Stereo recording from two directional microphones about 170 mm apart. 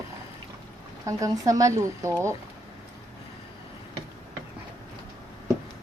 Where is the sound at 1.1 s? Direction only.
20° right (ahead or behind).